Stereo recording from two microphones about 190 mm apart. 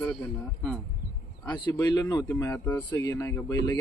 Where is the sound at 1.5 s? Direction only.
25° left (ahead or behind).